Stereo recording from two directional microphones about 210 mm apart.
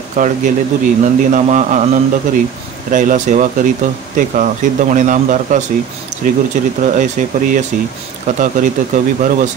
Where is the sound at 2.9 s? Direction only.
40° right (ahead or behind).